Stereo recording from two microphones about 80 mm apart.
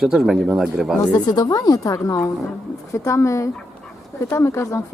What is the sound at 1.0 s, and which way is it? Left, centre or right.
A woman's voice, left.